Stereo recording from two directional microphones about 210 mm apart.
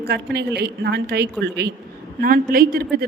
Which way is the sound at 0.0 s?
50° right (ahead or behind).